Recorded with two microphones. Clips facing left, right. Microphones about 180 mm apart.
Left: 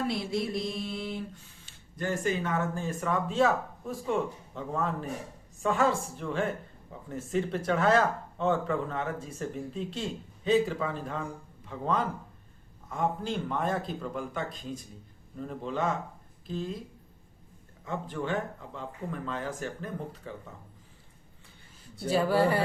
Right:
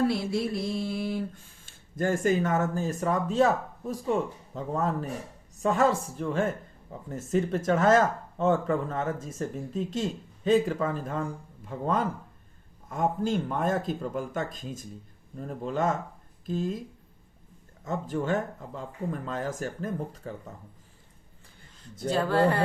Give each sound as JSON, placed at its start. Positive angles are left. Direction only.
{"t": 0.3, "sound": "mantra", "side_deg": 20}
{"t": 1.3, "sound": "speech", "side_deg": -50}
{"t": 17.8, "sound": "speech", "side_deg": -45}
{"t": 22.0, "sound": "speech", "side_deg": 10}